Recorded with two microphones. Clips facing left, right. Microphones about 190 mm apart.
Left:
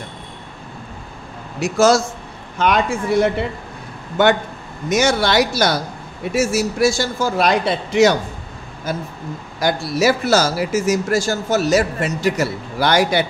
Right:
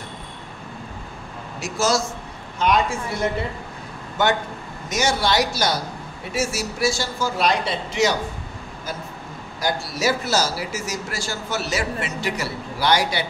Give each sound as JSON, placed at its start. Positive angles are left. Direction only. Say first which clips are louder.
{"t": 1.6, "sound": "speech", "louder": "left 8 dB", "side_deg": 55}
{"t": 4.8, "sound": "speech", "louder": "left 5 dB", "side_deg": 60}
{"t": 6.3, "sound": "speech", "louder": "left 7 dB", "side_deg": 50}
{"t": 9.7, "sound": "speech", "louder": "left 6 dB", "side_deg": 60}